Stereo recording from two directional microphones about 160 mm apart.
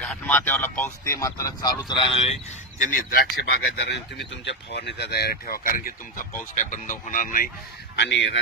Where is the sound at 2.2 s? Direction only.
45° left (ahead or behind).